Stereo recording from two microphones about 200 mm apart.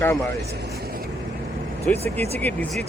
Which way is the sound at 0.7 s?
50° right (ahead or behind).